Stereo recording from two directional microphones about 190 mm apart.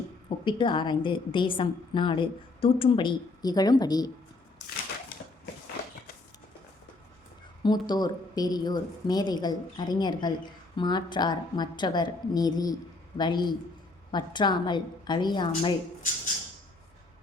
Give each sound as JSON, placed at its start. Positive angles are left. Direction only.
{"t": 0.4, "sound": "speech", "side_deg": 25}
{"t": 7.6, "sound": "speech", "side_deg": 20}